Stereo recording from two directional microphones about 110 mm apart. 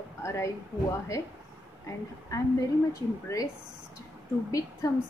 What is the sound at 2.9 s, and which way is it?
Speech, 30° left (ahead or behind).